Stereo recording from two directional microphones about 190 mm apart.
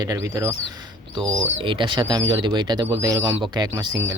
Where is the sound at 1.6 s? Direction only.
25° right (ahead or behind).